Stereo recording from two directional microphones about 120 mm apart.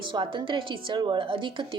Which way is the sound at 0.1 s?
45° right (ahead or behind).